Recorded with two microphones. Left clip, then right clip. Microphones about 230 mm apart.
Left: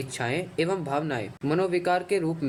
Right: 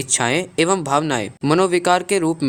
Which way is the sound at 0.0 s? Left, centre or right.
Right.